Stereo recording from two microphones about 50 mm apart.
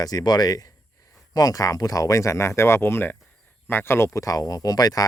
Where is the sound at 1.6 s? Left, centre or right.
Left.